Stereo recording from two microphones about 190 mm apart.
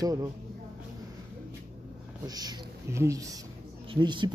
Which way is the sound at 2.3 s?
20° right (ahead or behind).